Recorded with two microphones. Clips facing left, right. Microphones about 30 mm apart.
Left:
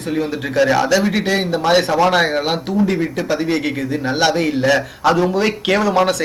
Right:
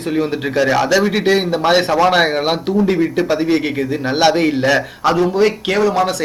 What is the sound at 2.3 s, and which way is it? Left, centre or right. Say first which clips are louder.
Speech: right 2 dB; right.